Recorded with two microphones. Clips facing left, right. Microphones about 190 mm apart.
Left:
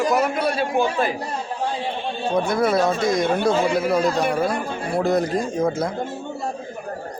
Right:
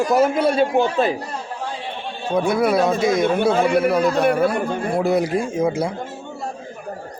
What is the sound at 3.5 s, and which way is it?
Speech, 60° right (ahead or behind).